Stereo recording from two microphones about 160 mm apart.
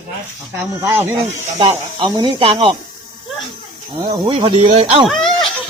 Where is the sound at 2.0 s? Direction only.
30° right (ahead or behind).